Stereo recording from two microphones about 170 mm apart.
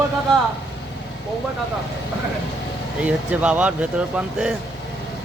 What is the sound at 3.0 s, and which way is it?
Speech, 5° right (ahead or behind).